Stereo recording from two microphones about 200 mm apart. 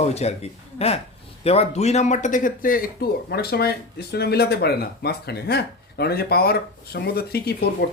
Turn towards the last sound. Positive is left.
turn(degrees=50)  # may be behind; listen again after turning